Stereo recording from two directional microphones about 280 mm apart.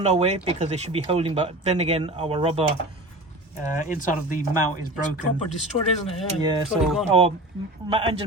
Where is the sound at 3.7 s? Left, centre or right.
Left.